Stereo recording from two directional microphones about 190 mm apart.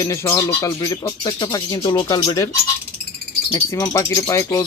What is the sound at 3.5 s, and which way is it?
Speech, 20° left (ahead or behind).